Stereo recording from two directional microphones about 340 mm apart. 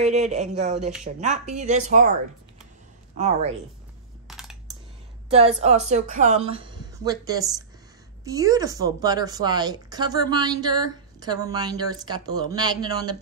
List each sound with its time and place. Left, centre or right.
0.0 s speech: centre
3.2 s speech: centre
4.3 s coin: centre
5.6 s speech: centre